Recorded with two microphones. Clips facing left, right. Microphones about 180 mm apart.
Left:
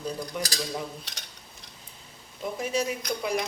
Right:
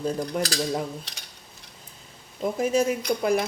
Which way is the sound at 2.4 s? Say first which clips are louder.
Right 6 dB; 45° right (ahead or behind).